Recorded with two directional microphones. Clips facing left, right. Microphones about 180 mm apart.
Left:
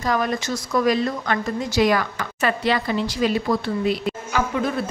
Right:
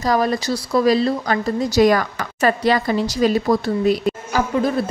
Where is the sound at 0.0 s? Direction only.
35° right (ahead or behind).